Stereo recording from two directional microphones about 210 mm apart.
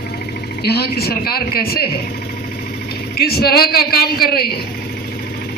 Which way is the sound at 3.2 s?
45° left (ahead or behind).